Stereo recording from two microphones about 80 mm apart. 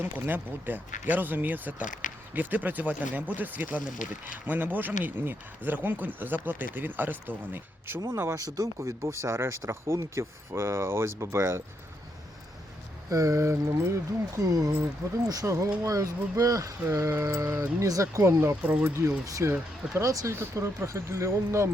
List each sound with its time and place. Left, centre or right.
0.0 s speech: right
13.1 s a sound: right
16.8 s speech: right
18.6 s speech: right
18.9 s speech: right